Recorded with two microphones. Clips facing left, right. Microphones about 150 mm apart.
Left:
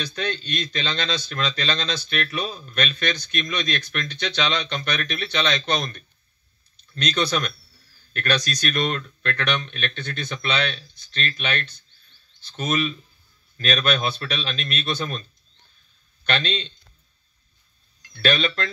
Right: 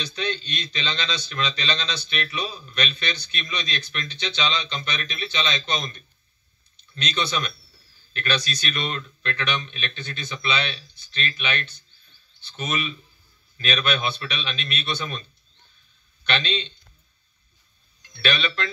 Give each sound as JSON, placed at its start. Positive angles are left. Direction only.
{"t": 0.0, "sound": "a man's voice", "side_deg": 50}
{"t": 16.3, "sound": "a man's voice", "side_deg": 35}
{"t": 18.1, "sound": "speech", "side_deg": 35}